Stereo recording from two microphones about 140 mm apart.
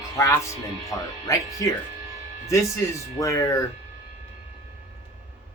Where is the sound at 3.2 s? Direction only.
25° left (ahead or behind).